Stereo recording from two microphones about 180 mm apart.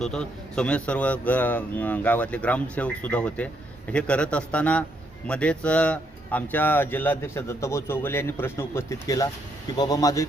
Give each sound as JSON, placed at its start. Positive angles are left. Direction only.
{"t": 0.0, "sound": "a man's voice", "side_deg": 5}